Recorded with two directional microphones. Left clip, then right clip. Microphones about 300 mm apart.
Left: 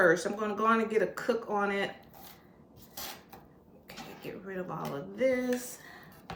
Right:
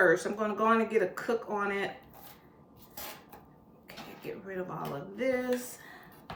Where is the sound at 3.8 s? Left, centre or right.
Centre.